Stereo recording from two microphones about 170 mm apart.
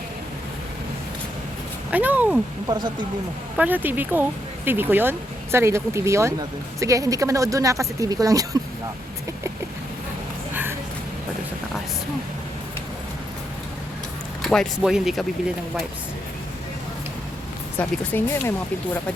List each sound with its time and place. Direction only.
1.9 s speech: 10° right (ahead or behind)
2.6 s speech: 25° right (ahead or behind)
3.6 s speech: 10° right (ahead or behind)
10.5 s a sound: 10° right (ahead or behind)
14.4 s speech: centre (ahead or behind)
17.7 s speech: 10° left (ahead or behind)